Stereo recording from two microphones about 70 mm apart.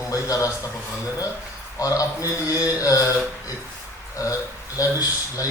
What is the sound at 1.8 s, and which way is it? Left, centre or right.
A man's voice, left.